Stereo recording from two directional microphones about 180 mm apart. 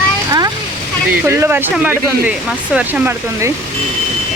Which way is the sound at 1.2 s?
15° right (ahead or behind).